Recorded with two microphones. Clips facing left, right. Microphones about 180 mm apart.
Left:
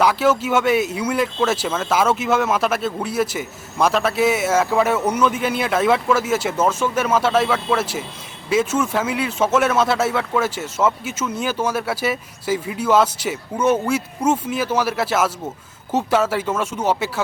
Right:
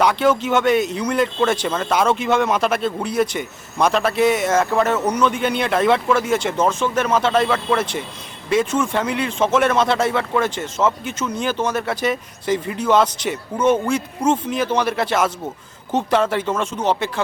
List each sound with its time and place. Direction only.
0.0 s speech: 5° left (ahead or behind)